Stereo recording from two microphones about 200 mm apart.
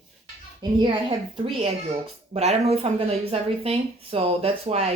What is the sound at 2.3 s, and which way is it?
Speech, 30° right (ahead or behind).